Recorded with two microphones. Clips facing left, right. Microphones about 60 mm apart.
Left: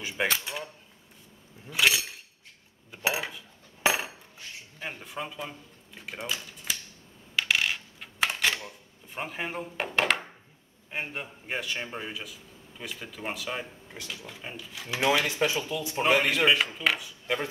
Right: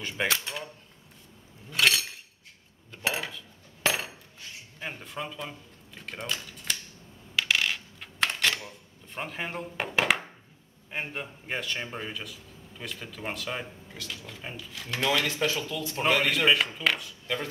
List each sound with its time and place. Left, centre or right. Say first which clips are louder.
0.2 s cutlery: even; centre
1.7 s a sound: even; centre
2.9 s cutlery: left 1 dB; centre
4.7 s a sound: even; centre
7.3 s coin: even; centre
10.9 s a man's voice: even; centre
16.0 s a man's voice: left 1 dB; centre